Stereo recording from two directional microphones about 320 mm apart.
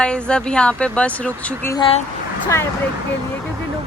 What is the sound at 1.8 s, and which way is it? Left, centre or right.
Speech, centre.